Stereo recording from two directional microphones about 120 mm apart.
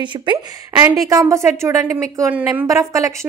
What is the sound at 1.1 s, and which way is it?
A woman's voice, 25° right (ahead or behind).